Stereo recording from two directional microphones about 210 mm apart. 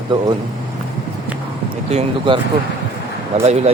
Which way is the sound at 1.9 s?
25° right (ahead or behind).